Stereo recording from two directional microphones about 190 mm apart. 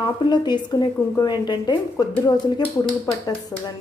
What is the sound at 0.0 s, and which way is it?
Speech, 25° left (ahead or behind).